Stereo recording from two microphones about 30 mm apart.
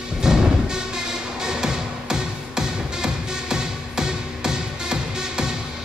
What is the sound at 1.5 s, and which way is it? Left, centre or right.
Music, right.